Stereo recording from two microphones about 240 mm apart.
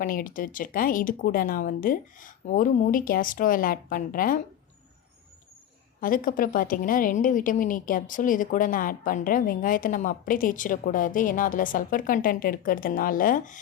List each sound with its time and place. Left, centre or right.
0.0 s a woman's voice: left
6.0 s a woman's voice: left